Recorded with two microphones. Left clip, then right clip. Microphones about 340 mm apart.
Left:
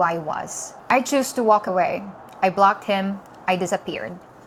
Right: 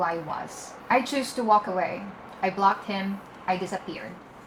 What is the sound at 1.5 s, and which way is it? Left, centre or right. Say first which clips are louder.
A woman's voice: left 4 dB; left.